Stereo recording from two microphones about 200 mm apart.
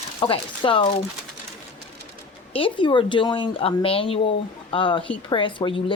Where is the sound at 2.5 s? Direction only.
25° left (ahead or behind).